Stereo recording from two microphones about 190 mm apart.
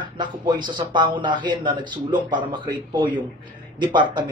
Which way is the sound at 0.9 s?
25° right (ahead or behind).